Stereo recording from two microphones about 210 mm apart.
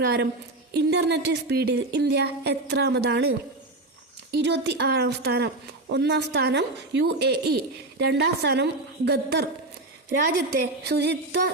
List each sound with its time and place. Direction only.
0.0 s speech: 50° right (ahead or behind)
4.4 s speech: 55° right (ahead or behind)